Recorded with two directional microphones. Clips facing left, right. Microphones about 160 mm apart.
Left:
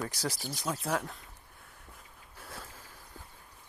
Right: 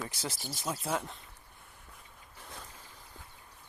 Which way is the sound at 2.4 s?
5° left (ahead or behind).